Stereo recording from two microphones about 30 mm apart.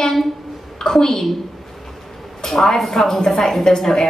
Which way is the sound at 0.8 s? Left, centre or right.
Centre.